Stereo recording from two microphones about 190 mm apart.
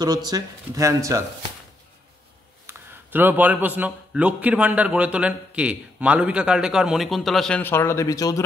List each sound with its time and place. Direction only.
0.0 s speech: 20° right (ahead or behind)
2.6 s a man's voice: 10° right (ahead or behind); by 8.5 s 15° left (ahead or behind)